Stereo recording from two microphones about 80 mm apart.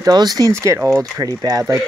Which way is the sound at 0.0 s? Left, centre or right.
Right.